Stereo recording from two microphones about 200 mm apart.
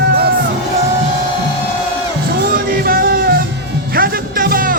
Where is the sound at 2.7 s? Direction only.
45° right (ahead or behind).